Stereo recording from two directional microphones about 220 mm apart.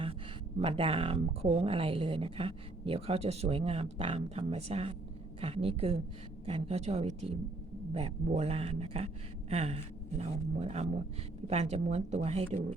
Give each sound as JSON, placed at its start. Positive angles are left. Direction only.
{"t": 0.6, "sound": "speech", "side_deg": -25}